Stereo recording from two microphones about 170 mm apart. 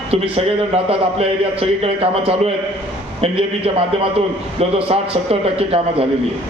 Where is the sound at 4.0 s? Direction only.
35° right (ahead or behind).